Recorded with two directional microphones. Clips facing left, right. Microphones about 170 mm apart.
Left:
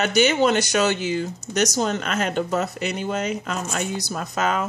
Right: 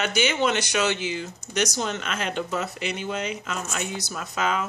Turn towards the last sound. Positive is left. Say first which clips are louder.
# left 3 dB
turn(degrees=40)  # may be behind; listen again after turning